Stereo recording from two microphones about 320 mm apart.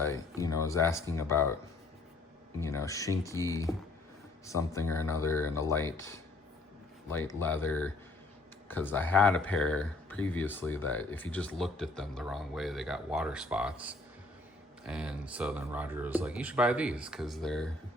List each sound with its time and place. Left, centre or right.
0.0 s speech: centre
2.6 s speech: centre
7.3 s speech: centre